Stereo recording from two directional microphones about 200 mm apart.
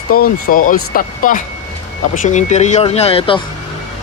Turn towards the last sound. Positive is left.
turn(degrees=25)  # may be behind; listen again after turning